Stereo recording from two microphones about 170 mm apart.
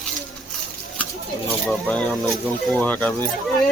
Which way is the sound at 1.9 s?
10° left (ahead or behind).